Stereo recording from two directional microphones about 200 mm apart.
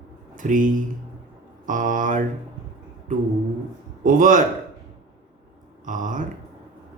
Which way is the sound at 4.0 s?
40° right (ahead or behind).